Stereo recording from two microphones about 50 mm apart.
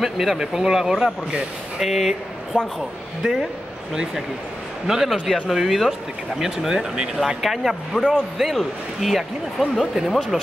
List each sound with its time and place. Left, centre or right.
0.0 s a man's voice: centre
2.5 s speech: right
3.9 s a man's voice: centre